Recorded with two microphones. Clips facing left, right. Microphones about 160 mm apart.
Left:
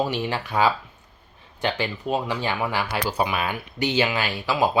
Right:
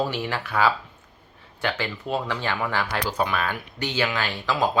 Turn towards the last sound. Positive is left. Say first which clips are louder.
# left 2 dB
turn(degrees=10)  # may be behind; listen again after turning